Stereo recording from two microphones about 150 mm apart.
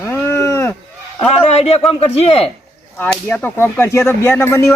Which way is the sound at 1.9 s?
40° left (ahead or behind).